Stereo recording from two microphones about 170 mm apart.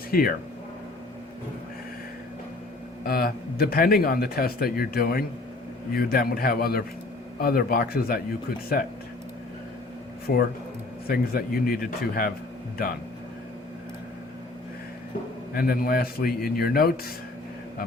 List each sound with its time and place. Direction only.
0.1 s speech: 60° left (ahead or behind)
3.0 s speech: 60° left (ahead or behind)
10.3 s speech: 60° left (ahead or behind)
15.5 s speech: 60° left (ahead or behind)